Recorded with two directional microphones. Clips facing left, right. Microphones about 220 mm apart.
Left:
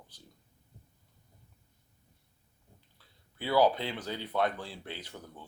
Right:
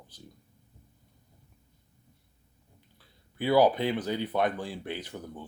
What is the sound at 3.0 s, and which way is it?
Speech, 15° right (ahead or behind).